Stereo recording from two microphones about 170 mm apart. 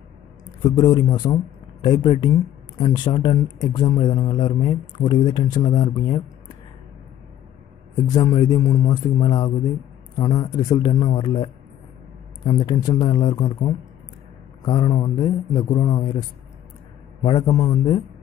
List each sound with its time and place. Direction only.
0.7 s speech: 25° left (ahead or behind)
8.1 s speech: 20° left (ahead or behind)